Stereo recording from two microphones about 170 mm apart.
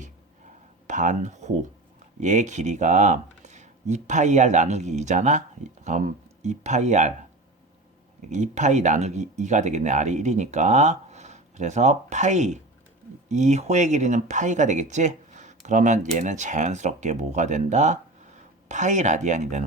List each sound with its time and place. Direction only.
0.9 s speech: 45° right (ahead or behind)
8.3 s speech: 45° right (ahead or behind)